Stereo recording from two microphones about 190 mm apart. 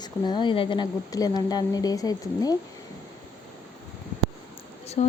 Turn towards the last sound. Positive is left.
turn(degrees=35)  # may be behind; listen again after turning